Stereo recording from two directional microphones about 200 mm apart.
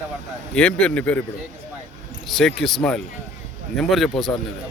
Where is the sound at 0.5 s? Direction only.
5° left (ahead or behind).